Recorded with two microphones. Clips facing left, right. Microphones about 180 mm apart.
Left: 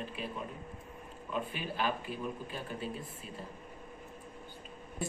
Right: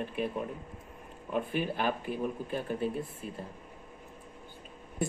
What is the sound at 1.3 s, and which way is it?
Speech, 55° right (ahead or behind).